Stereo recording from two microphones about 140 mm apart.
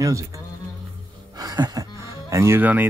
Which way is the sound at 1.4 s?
25° right (ahead or behind).